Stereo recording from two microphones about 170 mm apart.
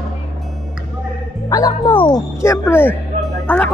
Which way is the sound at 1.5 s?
20° left (ahead or behind).